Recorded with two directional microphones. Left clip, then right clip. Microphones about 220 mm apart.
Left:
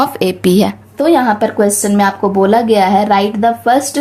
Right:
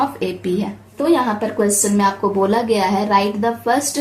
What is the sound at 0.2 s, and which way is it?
A woman's voice, 50° left (ahead or behind).